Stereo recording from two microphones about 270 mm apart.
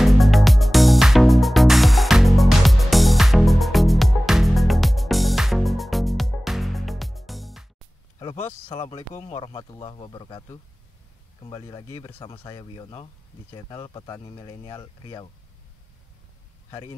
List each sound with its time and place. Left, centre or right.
0.0 s music: centre
8.2 s speech: centre